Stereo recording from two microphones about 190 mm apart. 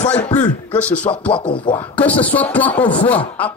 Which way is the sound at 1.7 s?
10° left (ahead or behind).